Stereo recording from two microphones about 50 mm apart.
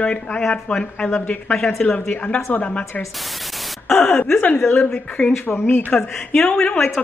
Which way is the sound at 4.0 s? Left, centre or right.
Left.